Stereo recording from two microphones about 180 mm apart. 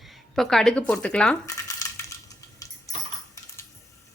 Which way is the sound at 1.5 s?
15° left (ahead or behind).